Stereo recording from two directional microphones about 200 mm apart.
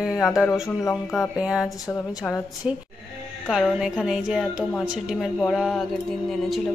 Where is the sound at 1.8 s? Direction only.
20° left (ahead or behind).